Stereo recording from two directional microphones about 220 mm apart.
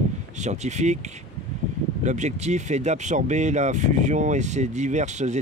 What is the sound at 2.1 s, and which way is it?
Speech, 30° right (ahead or behind).